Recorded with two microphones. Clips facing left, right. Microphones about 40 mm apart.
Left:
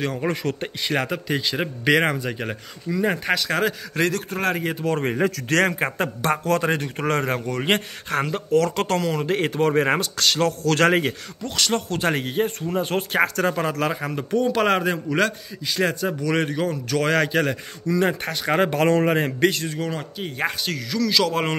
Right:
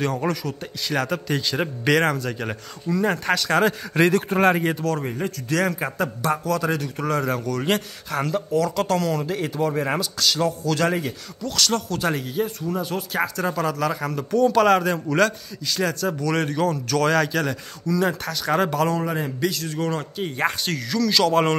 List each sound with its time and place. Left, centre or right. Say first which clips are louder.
0.0 s a man's voice: right 1 dB; centre
0.3 s speech: left 2 dB; left
0.8 s a man's voice: even; left
1.2 s a man's voice: even; centre
3.4 s a man's voice: right 6 dB; centre
3.9 s a man's voice: right 4 dB; centre
5.0 s speech: left 5 dB; left
5.9 s a man's voice: left 1 dB; left
8.5 s speech: left 3 dB; left
11.4 s a man's voice: even; left
14.0 s a man's voice: right 2 dB; left
19.0 s speech: left 5 dB; left
19.7 s a man's voice: right 2 dB; centre